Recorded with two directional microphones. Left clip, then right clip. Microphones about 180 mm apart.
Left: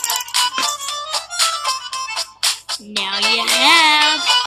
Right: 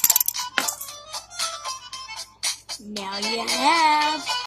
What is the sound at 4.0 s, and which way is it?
Music, 20° left (ahead or behind).